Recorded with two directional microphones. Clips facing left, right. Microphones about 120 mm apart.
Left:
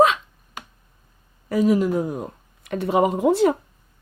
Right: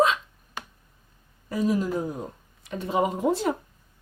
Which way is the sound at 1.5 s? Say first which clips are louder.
Left 6 dB; 90° left.